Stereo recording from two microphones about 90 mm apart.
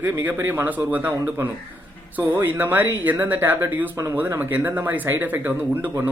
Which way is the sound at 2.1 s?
25° right (ahead or behind).